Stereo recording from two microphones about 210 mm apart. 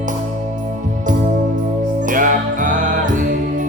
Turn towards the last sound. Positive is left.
turn(degrees=-40)  # may be behind; listen again after turning